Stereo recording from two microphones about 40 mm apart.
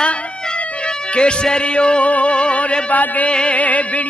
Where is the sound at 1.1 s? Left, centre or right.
Left.